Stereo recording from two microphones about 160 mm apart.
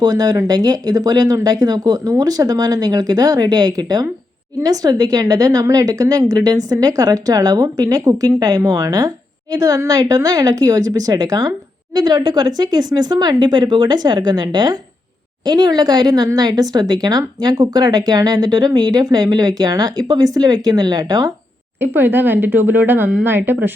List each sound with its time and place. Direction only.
0.0 s speech: 25° right (ahead or behind)
21.8 s speech: 15° right (ahead or behind)